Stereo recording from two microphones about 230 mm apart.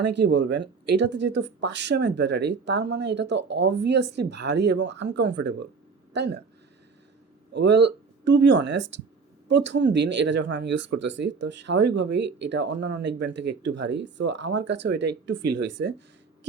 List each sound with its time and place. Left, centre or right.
0.0 s speech: right
7.5 s speech: right